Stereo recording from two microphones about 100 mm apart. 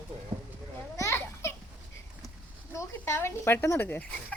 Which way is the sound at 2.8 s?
25° left (ahead or behind).